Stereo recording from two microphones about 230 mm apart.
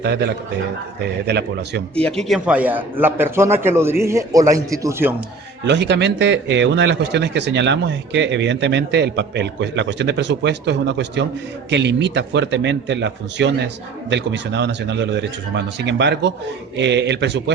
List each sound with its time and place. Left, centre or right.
0.0 s speech: right
2.0 s a man's voice: centre
5.6 s speech: right